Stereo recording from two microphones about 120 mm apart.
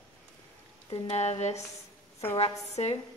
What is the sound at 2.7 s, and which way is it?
Speech, 65° left (ahead or behind).